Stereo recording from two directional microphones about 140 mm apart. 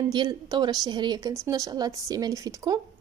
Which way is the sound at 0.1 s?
35° right (ahead or behind).